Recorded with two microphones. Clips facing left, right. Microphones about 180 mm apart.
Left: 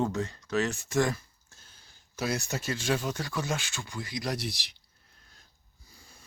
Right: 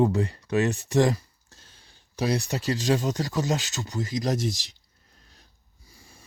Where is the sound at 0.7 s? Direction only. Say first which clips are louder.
Right 6 dB; 35° right (ahead or behind).